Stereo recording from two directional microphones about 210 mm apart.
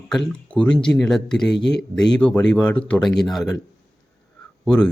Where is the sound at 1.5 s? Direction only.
55° left (ahead or behind).